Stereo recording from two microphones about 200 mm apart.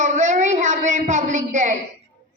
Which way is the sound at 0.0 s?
35° right (ahead or behind).